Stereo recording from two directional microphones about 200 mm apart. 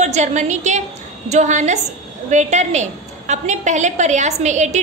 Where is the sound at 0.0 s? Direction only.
35° right (ahead or behind).